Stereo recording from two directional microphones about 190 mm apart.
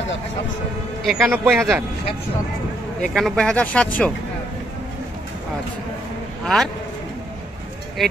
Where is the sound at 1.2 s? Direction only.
10° right (ahead or behind).